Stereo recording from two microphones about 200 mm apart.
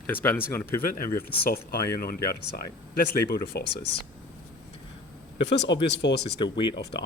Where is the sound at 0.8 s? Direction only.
45° left (ahead or behind).